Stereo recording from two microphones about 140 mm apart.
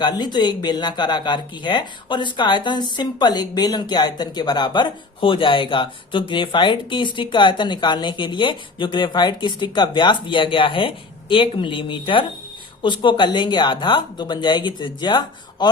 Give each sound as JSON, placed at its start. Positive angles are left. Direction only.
{"t": 0.0, "sound": "speech", "side_deg": 30}